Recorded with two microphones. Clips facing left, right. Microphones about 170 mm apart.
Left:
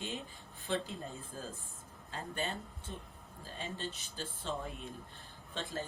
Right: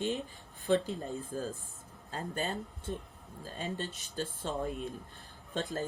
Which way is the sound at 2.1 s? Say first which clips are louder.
Right 3 dB; 40° right (ahead or behind).